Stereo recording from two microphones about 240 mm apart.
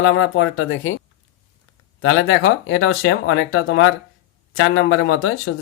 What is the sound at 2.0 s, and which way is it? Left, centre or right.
Speech, left.